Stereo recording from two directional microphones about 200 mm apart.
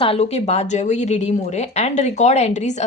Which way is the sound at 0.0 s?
30° left (ahead or behind).